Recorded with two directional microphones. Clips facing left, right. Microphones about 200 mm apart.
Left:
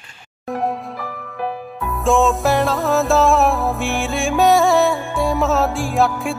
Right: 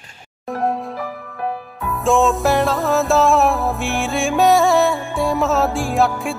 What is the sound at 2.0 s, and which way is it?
Music, centre (ahead or behind).